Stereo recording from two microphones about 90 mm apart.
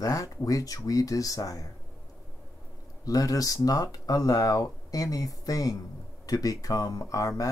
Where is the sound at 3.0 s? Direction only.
40° left (ahead or behind).